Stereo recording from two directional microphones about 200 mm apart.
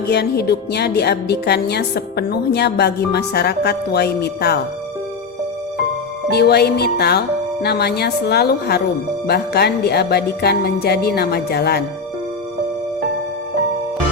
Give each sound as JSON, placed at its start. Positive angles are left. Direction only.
{"t": 0.1, "sound": "a woman's voice", "side_deg": 55}
{"t": 6.3, "sound": "music", "side_deg": 55}